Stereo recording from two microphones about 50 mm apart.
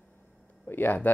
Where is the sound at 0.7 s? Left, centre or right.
Left.